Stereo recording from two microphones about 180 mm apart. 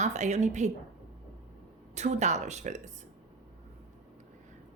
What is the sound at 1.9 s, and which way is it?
A woman's voice, 40° right (ahead or behind).